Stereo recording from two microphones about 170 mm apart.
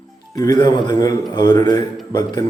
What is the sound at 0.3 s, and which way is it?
Speech, 20° left (ahead or behind).